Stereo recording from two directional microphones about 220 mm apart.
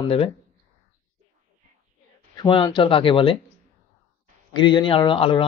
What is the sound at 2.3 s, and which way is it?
Speech, 20° left (ahead or behind).